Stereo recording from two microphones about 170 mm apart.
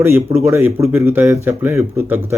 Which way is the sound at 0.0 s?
15° right (ahead or behind).